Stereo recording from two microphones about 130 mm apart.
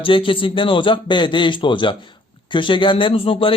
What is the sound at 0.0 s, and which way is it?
A man's voice, 40° left (ahead or behind).